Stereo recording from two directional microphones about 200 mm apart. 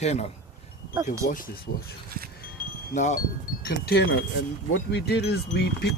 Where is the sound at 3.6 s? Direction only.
55° left (ahead or behind).